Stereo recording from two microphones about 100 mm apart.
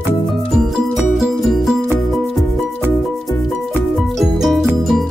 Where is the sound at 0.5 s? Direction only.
5° right (ahead or behind).